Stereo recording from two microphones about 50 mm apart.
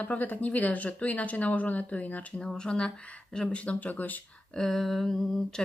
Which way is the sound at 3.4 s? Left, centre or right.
Left.